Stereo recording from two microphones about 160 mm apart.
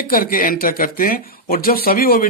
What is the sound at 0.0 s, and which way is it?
Speech, 65° left (ahead or behind).